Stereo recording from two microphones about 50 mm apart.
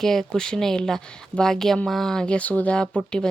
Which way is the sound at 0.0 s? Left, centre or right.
Centre.